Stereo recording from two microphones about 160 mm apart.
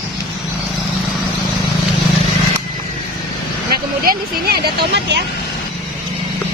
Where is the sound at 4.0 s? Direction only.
70° right (ahead or behind).